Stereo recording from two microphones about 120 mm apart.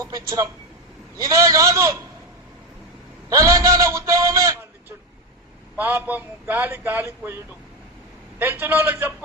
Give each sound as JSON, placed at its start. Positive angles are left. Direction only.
{"t": 0.0, "sound": "a man's voice", "side_deg": -30}
{"t": 3.2, "sound": "a man's voice", "side_deg": -25}
{"t": 5.7, "sound": "a man's voice", "side_deg": -15}
{"t": 8.4, "sound": "a man's voice", "side_deg": -15}